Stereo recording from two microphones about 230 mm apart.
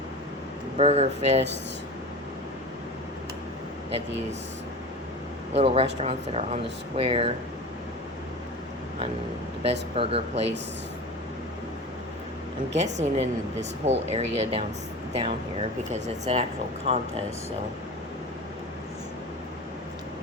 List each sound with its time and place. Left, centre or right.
0.8 s speech: right
5.5 s speech: right
9.9 s speech: right
12.7 s speech: right